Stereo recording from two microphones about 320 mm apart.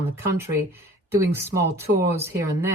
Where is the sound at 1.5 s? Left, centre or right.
Right.